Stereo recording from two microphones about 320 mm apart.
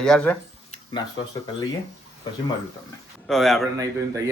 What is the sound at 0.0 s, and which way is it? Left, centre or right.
Speech, centre.